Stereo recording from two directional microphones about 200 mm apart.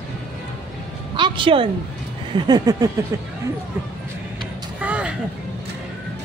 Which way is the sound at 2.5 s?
20° right (ahead or behind).